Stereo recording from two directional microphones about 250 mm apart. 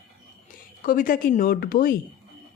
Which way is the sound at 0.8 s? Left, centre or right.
Left.